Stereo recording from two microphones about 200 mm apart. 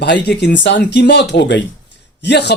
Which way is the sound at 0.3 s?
60° left (ahead or behind).